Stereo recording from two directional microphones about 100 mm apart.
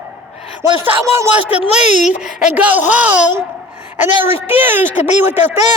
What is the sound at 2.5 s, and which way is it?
Speech, 15° right (ahead or behind).